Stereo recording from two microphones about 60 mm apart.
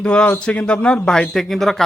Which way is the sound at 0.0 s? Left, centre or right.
Centre.